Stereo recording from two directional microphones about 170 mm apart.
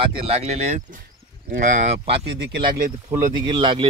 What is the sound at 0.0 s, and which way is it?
Speech, 35° right (ahead or behind).